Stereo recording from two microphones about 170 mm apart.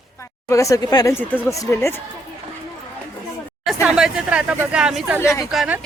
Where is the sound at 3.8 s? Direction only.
5° right (ahead or behind).